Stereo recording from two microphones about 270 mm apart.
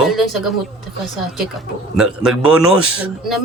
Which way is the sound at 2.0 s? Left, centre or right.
Centre.